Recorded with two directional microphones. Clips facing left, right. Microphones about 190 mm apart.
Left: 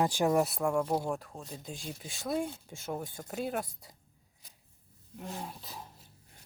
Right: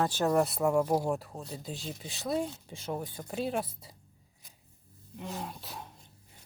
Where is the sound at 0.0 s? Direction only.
15° left (ahead or behind).